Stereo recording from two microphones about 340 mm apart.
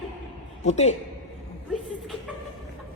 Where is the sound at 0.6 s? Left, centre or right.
Centre.